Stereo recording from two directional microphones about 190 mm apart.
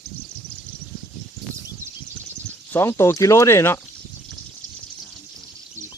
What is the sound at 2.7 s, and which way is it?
Speech, 15° left (ahead or behind).